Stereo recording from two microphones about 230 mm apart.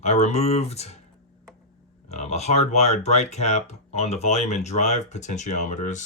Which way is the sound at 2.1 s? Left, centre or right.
Left.